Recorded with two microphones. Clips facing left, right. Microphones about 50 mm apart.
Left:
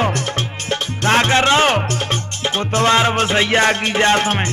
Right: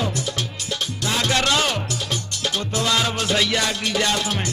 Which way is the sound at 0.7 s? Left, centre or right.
Left.